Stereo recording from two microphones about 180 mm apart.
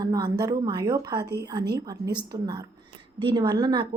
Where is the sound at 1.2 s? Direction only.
65° right (ahead or behind).